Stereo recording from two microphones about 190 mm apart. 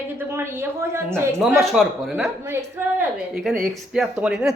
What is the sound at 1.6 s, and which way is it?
A man's voice, 5° right (ahead or behind).